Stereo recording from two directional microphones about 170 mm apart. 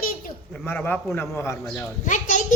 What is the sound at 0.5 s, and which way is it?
Speech, 10° left (ahead or behind).